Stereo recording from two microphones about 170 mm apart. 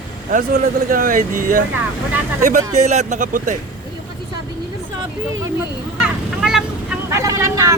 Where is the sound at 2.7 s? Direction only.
45° right (ahead or behind).